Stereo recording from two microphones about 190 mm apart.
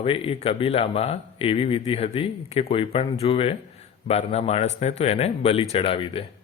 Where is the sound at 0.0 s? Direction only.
30° left (ahead or behind).